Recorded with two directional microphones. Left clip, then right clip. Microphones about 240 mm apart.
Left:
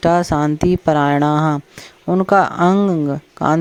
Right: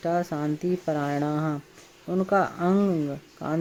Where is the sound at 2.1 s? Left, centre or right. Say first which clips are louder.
Left 10 dB; left.